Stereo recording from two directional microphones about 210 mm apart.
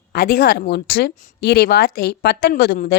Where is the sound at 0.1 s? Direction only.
45° left (ahead or behind).